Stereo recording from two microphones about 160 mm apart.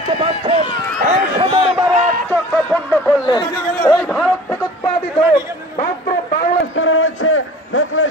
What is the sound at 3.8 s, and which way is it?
Speech, 5° left (ahead or behind).